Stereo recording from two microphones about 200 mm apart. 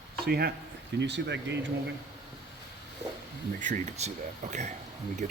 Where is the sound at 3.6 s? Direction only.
35° right (ahead or behind).